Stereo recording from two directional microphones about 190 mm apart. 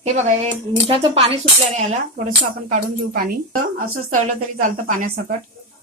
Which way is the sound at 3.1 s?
45° right (ahead or behind).